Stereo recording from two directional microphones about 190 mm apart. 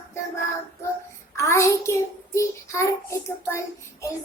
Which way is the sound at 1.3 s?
15° left (ahead or behind).